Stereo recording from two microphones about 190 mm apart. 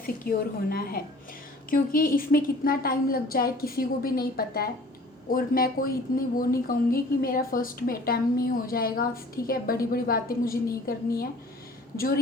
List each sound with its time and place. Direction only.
0.0 s speech: 50° left (ahead or behind)